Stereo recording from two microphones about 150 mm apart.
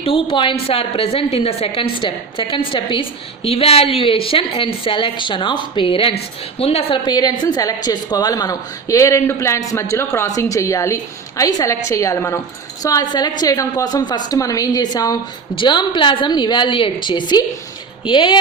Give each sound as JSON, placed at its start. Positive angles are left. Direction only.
{"t": 0.0, "sound": "a woman's voice", "side_deg": 35}